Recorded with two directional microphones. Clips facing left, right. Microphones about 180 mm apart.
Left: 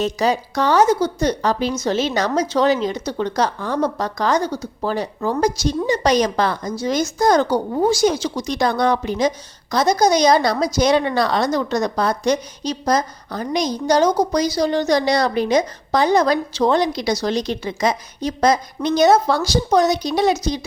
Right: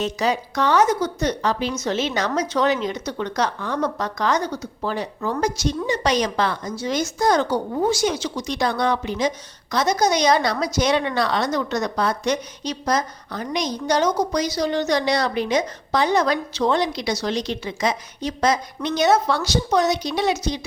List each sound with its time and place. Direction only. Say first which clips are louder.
0.0 s a woman's voice: left 3 dB; 35° left (ahead or behind)